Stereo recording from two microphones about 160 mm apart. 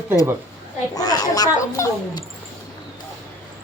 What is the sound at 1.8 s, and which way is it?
Speech, 20° left (ahead or behind).